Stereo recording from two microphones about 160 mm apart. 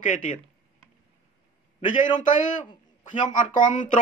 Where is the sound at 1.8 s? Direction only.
55° left (ahead or behind).